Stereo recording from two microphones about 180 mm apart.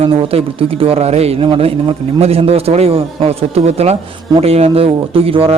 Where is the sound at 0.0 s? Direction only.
30° right (ahead or behind).